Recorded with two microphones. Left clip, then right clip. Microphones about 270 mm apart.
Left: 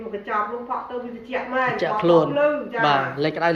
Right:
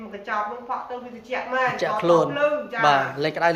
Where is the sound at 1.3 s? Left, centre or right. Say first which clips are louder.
Even; centre.